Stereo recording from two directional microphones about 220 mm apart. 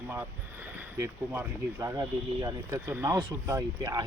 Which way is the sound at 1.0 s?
10° right (ahead or behind).